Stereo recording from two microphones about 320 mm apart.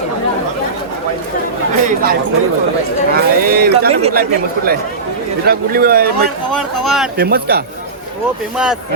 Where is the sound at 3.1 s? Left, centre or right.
Right.